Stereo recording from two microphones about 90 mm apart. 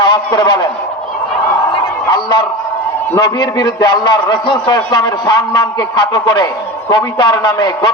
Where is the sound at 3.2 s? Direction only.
50° left (ahead or behind).